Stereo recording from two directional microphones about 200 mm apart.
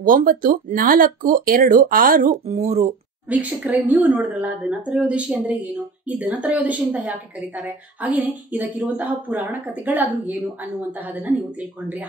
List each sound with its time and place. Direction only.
0.0 s speech: 45° right (ahead or behind)
3.3 s a woman's voice: 5° right (ahead or behind)